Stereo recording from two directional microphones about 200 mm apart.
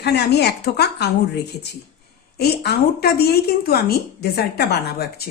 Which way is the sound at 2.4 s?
50° left (ahead or behind).